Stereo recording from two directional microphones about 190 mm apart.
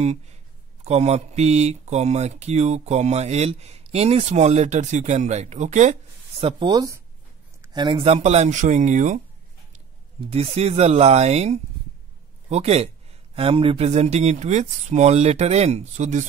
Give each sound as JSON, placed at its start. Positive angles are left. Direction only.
{"t": 0.0, "sound": "speech", "side_deg": -35}
{"t": 6.4, "sound": "speech", "side_deg": -25}
{"t": 10.3, "sound": "speech", "side_deg": -30}